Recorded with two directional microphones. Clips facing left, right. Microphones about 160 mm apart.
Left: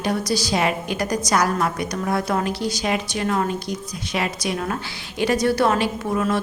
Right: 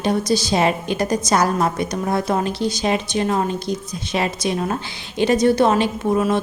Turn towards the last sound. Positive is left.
turn(degrees=-20)  # may be behind; listen again after turning